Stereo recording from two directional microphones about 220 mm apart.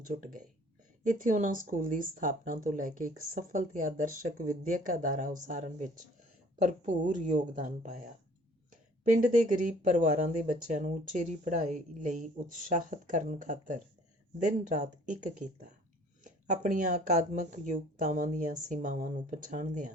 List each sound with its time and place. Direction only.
0.0 s speech: 40° right (ahead or behind)